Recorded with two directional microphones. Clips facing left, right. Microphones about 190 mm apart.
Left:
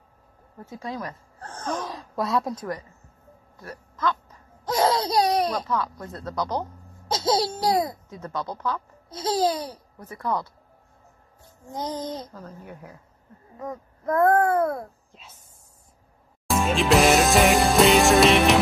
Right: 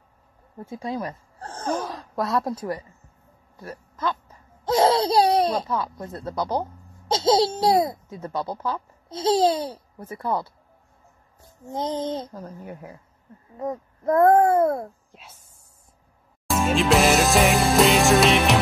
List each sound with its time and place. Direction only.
0.6 s a sound: 25° right (ahead or behind)
1.7 s speech: centre (ahead or behind)
3.6 s a child's voice: 25° right (ahead or behind)
8.4 s speech: 10° right (ahead or behind)
8.7 s a child's voice: 25° right (ahead or behind)
11.7 s a child's voice: 25° right (ahead or behind)
13.6 s a child's voice: 25° right (ahead or behind)
16.4 s music: centre (ahead or behind)